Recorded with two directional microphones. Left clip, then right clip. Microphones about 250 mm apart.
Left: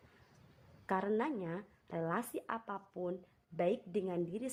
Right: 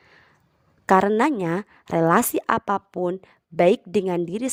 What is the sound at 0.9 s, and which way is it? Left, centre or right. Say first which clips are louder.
A woman's voice: right 18 dB; right.